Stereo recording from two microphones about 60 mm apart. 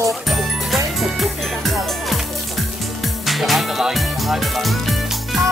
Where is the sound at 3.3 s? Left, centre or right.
Centre.